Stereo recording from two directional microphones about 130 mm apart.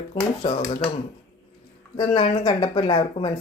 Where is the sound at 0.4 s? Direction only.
45° left (ahead or behind).